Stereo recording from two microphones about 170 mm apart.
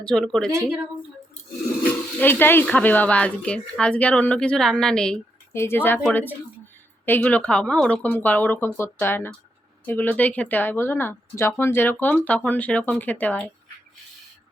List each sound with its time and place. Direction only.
0.0 s speech: 5° left (ahead or behind)
2.1 s speech: 10° left (ahead or behind)